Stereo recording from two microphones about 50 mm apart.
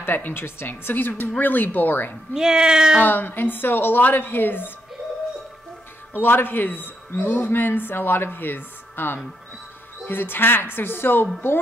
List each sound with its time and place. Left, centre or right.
0.0 s speech: left
2.3 s speech: centre
3.0 s speech: left
6.1 s speech: left